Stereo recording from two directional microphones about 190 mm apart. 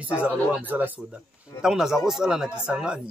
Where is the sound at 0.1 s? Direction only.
10° right (ahead or behind).